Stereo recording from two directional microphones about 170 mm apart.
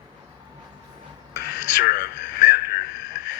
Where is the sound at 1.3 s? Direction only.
70° left (ahead or behind).